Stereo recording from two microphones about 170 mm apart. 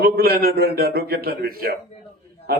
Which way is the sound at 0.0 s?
60° right (ahead or behind).